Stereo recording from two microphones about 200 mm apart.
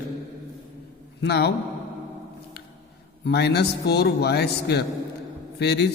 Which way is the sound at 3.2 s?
55° left (ahead or behind).